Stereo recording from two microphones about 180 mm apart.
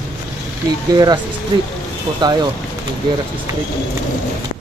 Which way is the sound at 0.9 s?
20° right (ahead or behind).